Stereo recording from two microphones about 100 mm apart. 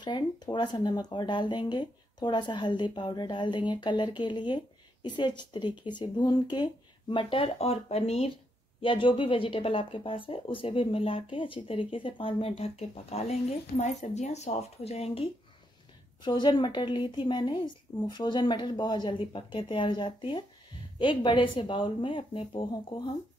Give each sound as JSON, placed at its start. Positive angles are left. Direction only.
{"t": 0.0, "sound": "speech", "side_deg": 50}
{"t": 8.8, "sound": "speech", "side_deg": 60}
{"t": 16.2, "sound": "speech", "side_deg": 50}